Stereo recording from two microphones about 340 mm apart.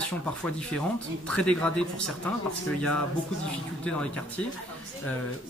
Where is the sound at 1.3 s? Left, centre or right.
Centre.